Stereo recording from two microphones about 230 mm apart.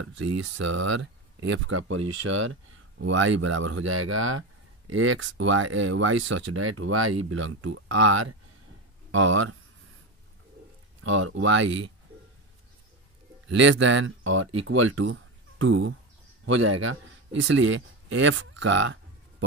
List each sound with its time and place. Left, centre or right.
0.2 s speech: right
11.1 s speech: right
13.5 s a man's voice: right